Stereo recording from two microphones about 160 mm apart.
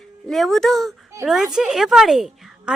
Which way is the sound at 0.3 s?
Centre (ahead or behind).